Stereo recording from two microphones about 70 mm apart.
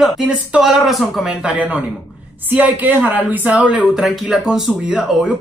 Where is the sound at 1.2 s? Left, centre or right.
Centre.